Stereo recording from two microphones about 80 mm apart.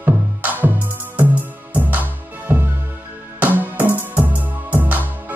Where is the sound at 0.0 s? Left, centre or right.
Right.